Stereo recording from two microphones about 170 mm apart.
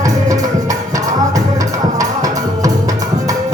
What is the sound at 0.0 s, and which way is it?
Music, 20° right (ahead or behind).